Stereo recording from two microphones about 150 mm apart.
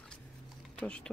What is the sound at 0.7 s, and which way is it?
Speech, 5° left (ahead or behind).